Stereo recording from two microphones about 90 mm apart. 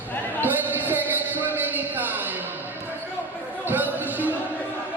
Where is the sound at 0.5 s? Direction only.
20° right (ahead or behind).